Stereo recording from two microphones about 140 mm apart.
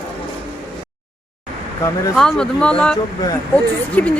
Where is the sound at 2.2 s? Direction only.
5° left (ahead or behind).